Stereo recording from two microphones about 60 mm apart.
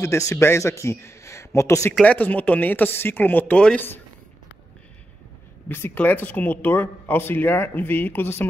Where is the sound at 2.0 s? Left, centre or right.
Left.